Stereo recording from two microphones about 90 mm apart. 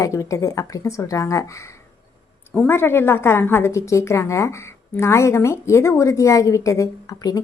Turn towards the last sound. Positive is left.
turn(degrees=40)  # may be behind; listen again after turning